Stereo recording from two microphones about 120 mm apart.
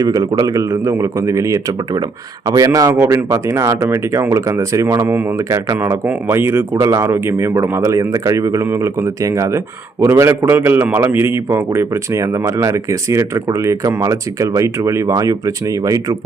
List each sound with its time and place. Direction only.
0.0 s speech: 30° right (ahead or behind)